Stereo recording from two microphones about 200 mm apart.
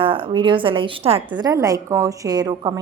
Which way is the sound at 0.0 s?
25° right (ahead or behind).